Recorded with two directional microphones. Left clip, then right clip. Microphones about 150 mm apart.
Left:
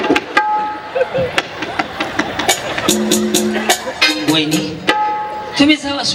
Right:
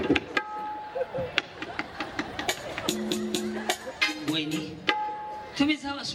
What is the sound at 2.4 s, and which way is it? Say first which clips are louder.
Music: left 15 dB; 25° right (ahead or behind).